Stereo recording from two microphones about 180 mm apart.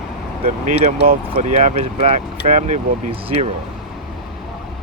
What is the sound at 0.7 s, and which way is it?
Speech, 45° right (ahead or behind).